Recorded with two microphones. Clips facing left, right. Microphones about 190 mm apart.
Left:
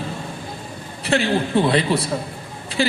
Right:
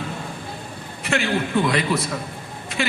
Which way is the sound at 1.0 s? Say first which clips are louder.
Left 3 dB; 35° left (ahead or behind).